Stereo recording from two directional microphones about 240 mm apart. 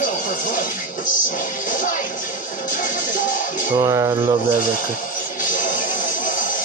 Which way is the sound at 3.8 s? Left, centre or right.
Centre.